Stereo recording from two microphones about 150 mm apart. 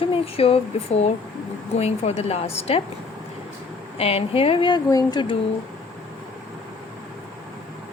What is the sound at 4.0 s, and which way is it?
Speech, 40° left (ahead or behind).